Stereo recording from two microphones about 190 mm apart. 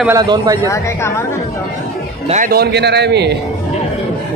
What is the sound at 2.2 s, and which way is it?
Speech, 40° right (ahead or behind).